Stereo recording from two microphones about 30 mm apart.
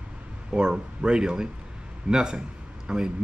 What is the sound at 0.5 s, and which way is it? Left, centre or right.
A man's voice, right.